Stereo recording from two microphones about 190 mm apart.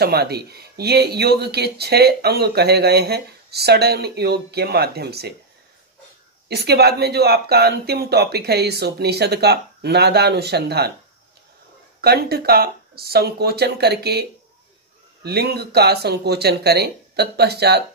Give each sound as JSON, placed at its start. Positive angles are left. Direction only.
{"t": 0.0, "sound": "speech", "side_deg": -55}
{"t": 6.5, "sound": "speech", "side_deg": -60}
{"t": 12.0, "sound": "speech", "side_deg": -55}
{"t": 15.2, "sound": "speech", "side_deg": -55}